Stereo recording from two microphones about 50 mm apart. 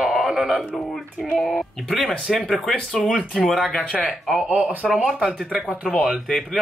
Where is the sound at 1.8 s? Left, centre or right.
Centre.